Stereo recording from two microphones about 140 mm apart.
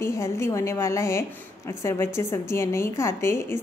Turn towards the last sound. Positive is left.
turn(degrees=20)  # may be behind; listen again after turning